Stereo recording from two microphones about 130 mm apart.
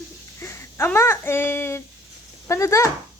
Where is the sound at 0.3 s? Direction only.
20° left (ahead or behind).